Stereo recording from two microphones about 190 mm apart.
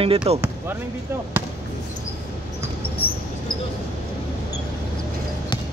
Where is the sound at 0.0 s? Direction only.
30° right (ahead or behind).